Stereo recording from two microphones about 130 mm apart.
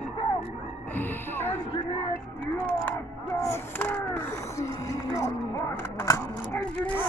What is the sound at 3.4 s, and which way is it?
Speech, 15° left (ahead or behind).